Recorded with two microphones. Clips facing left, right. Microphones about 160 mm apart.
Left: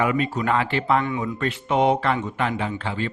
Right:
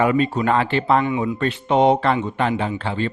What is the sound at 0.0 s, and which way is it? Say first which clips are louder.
Speech: right 4 dB; 35° right (ahead or behind).